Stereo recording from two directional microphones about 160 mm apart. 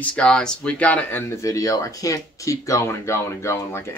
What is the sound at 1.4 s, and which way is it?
Speech, 20° left (ahead or behind).